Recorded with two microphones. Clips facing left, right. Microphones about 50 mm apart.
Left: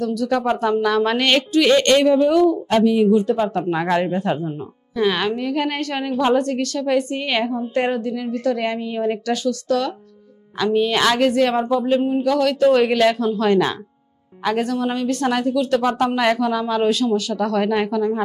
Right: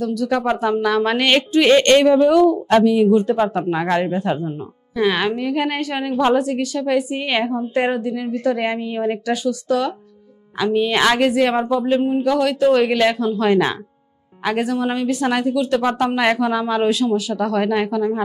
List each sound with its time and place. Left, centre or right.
0.0 s a woman's voice: centre
1.5 s speech: right
2.0 s speech: right
3.3 s speech: right
3.6 s a woman's voice: centre